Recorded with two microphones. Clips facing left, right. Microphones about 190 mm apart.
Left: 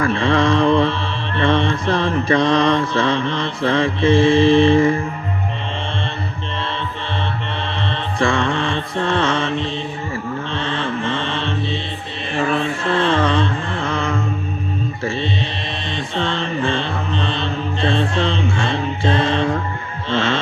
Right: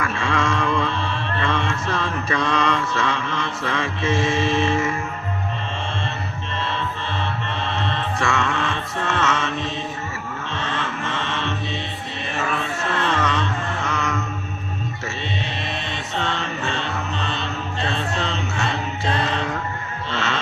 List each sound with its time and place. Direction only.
0.0 s mantra: 30° left (ahead or behind)
7.8 s mantra: 30° left (ahead or behind)
15.9 s mantra: 30° left (ahead or behind)
20.1 s a sound: 30° left (ahead or behind)